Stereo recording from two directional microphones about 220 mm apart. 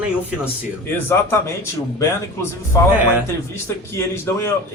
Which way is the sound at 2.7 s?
15° left (ahead or behind).